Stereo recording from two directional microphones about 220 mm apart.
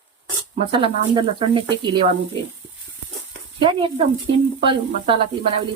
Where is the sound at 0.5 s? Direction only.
25° right (ahead or behind).